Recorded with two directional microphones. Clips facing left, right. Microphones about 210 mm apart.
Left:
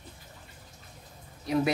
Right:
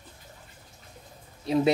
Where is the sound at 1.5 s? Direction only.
25° right (ahead or behind).